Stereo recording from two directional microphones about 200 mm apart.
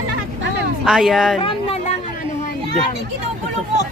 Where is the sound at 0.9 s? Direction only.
Centre (ahead or behind).